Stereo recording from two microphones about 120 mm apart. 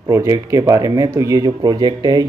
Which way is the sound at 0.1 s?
25° right (ahead or behind).